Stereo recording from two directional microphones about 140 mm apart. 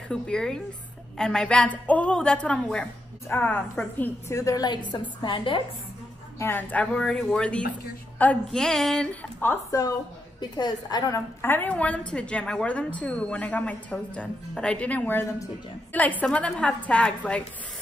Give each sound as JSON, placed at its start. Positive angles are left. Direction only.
{"t": 0.1, "sound": "a woman's voice", "side_deg": 5}
{"t": 4.9, "sound": "a woman's voice", "side_deg": 35}
{"t": 6.4, "sound": "a woman's voice", "side_deg": 15}